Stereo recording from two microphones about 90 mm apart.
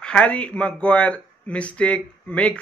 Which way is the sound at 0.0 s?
10° left (ahead or behind).